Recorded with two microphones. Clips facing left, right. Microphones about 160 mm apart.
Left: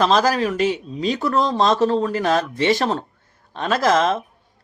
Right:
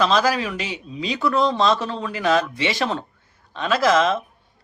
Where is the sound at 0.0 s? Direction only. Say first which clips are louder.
Left 2 dB; 45° left (ahead or behind).